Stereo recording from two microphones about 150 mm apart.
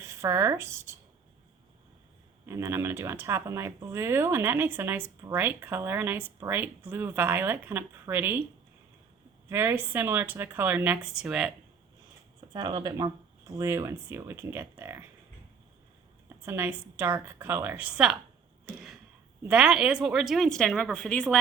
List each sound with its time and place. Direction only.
0.0 s speech: 20° right (ahead or behind)
2.5 s speech: 20° right (ahead or behind)
9.5 s speech: 15° right (ahead or behind)
12.5 s speech: 25° right (ahead or behind)
16.5 s speech: 15° right (ahead or behind)
19.5 s a woman's voice: 5° right (ahead or behind)